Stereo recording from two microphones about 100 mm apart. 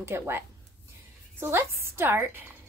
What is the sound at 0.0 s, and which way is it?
A woman's voice, 25° right (ahead or behind).